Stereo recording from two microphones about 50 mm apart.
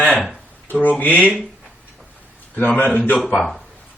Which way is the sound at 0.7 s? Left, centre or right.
Left.